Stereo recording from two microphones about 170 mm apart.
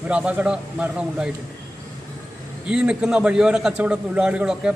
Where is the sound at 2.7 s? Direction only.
5° right (ahead or behind).